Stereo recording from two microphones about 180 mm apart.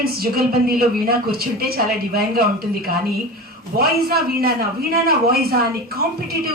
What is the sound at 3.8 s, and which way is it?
A woman's voice, 55° right (ahead or behind).